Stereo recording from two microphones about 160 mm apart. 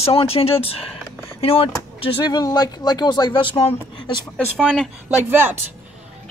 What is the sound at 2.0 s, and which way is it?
Speech, 25° left (ahead or behind).